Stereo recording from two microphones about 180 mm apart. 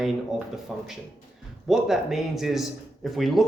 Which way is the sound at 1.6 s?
Centre (ahead or behind).